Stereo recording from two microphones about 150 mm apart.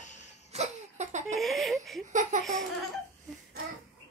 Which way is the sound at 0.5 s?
50° right (ahead or behind).